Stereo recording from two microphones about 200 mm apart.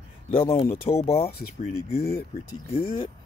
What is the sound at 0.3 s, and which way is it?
Speech, 30° left (ahead or behind).